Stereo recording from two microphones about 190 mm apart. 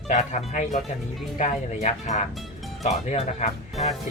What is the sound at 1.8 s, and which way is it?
Speech, 35° left (ahead or behind).